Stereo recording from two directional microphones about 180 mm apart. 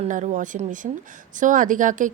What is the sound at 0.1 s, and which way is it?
Speech, 45° right (ahead or behind).